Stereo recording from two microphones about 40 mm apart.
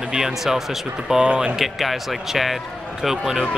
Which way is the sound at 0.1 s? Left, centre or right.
Centre.